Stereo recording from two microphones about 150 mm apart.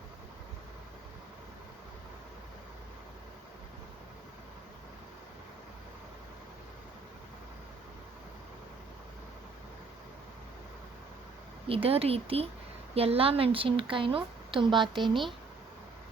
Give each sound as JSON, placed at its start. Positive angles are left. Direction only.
{"t": 11.7, "sound": "speech", "side_deg": -40}